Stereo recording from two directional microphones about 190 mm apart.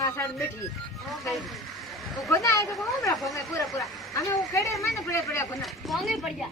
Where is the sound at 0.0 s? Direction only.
15° left (ahead or behind).